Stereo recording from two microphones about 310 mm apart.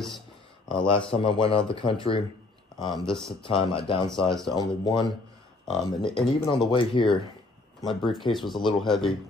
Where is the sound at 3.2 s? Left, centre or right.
Centre.